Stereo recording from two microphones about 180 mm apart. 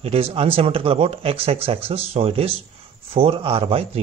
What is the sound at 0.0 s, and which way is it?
A man's voice, 30° right (ahead or behind).